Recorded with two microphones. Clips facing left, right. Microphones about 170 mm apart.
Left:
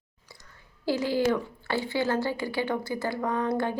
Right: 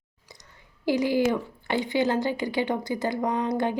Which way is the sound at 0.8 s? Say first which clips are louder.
Right 2 dB; 15° right (ahead or behind).